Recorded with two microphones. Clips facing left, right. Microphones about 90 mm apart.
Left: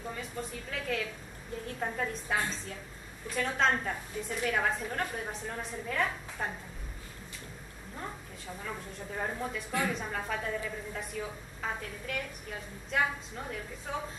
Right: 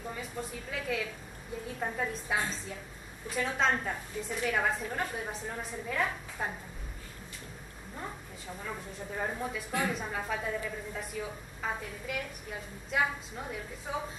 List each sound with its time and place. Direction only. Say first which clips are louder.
0.1 s a woman's voice: even; 5° right (ahead or behind)
8.6 s a woman's voice: right 1 dB; 5° right (ahead or behind)